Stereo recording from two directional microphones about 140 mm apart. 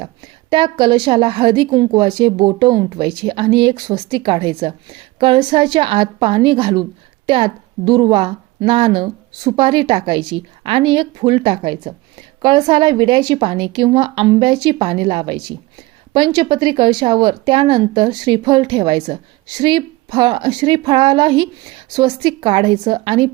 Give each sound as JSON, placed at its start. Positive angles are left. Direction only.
{"t": 0.5, "sound": "speech", "side_deg": -35}